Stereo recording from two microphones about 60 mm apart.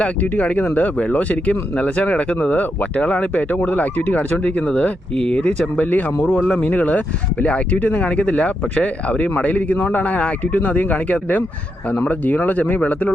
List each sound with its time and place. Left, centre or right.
0.0 s speech: left
5.8 s speech: left